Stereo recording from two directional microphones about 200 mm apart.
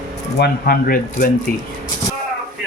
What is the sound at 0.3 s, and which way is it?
Speech, 50° left (ahead or behind).